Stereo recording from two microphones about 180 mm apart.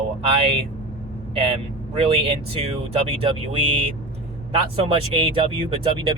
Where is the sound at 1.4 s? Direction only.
30° right (ahead or behind).